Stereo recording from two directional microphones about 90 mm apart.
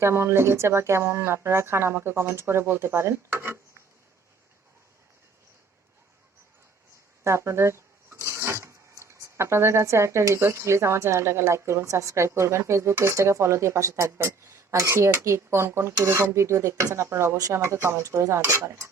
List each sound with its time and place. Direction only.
0.0 s speech: 30° right (ahead or behind)
7.3 s speech: 30° right (ahead or behind)